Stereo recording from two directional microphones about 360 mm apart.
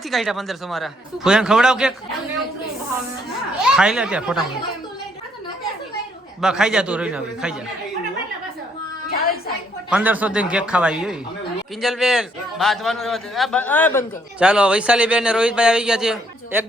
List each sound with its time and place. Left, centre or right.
0.1 s a man's voice: centre
3.6 s a man's voice: centre
6.4 s a man's voice: centre
9.1 s a sound: left
9.9 s a man's voice: centre